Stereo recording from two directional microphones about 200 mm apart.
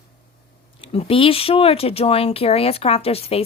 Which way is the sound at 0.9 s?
30° left (ahead or behind).